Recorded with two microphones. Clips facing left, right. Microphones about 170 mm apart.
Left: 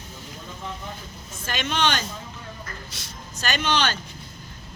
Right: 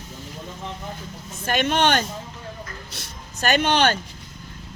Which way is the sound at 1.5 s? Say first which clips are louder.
Right 5 dB; 55° right (ahead or behind).